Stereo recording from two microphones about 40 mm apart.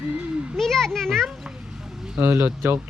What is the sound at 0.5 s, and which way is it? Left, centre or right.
Speech, centre.